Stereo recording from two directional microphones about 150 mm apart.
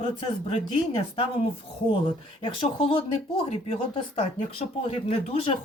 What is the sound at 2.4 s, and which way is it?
Speech, 35° left (ahead or behind).